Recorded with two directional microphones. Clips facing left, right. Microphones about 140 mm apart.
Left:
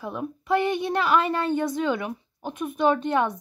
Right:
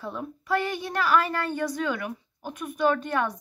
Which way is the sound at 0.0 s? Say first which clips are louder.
Left 3 dB; 15° left (ahead or behind).